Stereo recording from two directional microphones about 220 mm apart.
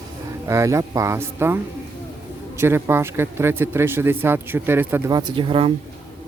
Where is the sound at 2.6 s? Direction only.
10° right (ahead or behind).